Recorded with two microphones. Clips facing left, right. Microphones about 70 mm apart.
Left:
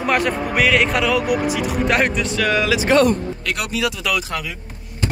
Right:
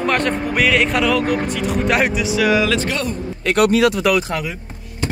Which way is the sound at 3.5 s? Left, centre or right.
Right.